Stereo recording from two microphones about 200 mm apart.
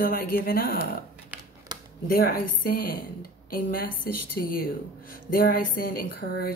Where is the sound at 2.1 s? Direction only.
45° left (ahead or behind).